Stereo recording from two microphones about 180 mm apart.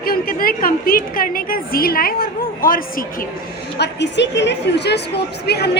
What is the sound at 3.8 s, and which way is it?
A woman's voice, 75° left (ahead or behind).